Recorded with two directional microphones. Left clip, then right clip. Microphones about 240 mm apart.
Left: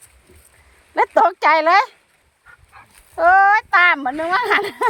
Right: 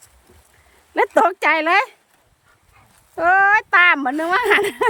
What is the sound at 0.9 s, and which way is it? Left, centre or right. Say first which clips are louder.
Speech: left 1 dB; centre.